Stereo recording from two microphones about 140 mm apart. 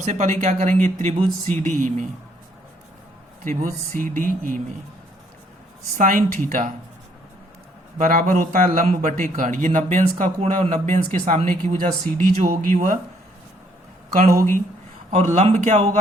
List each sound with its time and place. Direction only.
0.0 s speech: 55° right (ahead or behind)
3.4 s a man's voice: 65° right (ahead or behind)
6.0 s a man's voice: 70° right (ahead or behind)
7.9 s a man's voice: 80° right; by 13.0 s 65° right (ahead or behind)
15.1 s speech: 55° right (ahead or behind)